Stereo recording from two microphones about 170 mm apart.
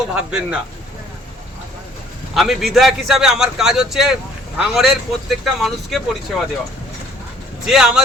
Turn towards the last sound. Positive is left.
turn(degrees=-5)  # may be behind; listen again after turning